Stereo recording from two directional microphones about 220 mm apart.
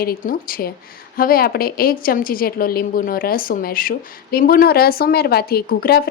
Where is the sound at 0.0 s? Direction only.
40° left (ahead or behind).